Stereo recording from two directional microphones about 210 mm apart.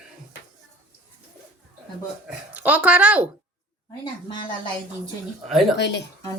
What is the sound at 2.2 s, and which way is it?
Speech, 5° right (ahead or behind).